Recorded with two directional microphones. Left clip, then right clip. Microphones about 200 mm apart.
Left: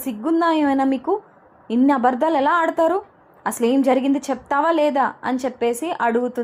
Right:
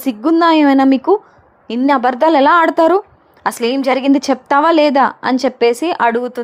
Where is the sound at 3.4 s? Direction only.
55° right (ahead or behind).